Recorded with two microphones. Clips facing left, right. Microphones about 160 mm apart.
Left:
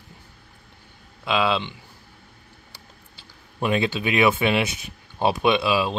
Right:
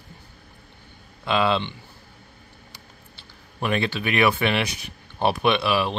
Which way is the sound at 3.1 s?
15° left (ahead or behind).